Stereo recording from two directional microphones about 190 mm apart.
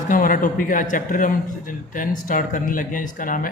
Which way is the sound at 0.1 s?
45° left (ahead or behind).